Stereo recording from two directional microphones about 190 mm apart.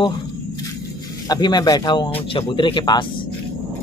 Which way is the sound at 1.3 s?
20° left (ahead or behind).